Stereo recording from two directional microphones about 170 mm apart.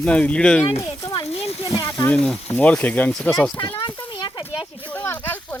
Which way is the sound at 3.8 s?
30° left (ahead or behind).